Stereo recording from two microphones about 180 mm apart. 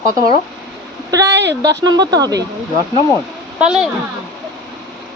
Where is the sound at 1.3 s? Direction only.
75° right (ahead or behind).